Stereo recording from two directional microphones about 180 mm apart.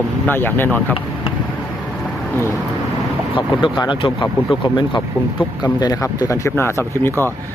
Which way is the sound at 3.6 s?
25° left (ahead or behind).